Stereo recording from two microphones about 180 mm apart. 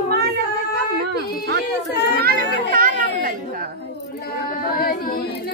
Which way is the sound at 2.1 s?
55° right (ahead or behind).